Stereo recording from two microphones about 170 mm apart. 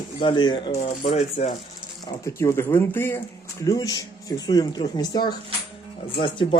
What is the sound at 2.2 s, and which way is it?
Speech, 15° left (ahead or behind).